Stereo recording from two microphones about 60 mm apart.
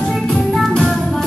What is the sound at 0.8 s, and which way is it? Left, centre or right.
Music, centre.